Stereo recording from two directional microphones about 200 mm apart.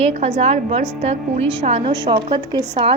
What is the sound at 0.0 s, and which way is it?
A woman's voice, 30° right (ahead or behind).